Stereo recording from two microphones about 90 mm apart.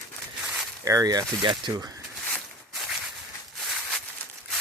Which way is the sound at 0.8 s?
40° right (ahead or behind).